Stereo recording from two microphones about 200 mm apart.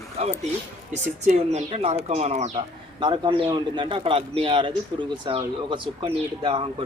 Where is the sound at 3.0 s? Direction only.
25° right (ahead or behind).